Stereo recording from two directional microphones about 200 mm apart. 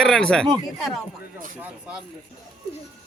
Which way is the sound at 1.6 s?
5° right (ahead or behind).